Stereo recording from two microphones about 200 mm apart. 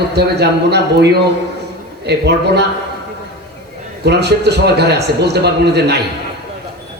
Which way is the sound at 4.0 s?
55° right (ahead or behind).